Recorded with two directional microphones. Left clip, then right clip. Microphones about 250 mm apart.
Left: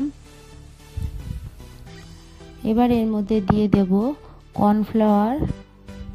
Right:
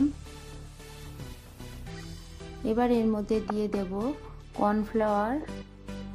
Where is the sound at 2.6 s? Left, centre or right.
Left.